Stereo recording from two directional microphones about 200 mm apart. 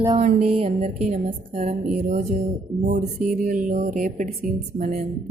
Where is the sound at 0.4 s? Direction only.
30° right (ahead or behind).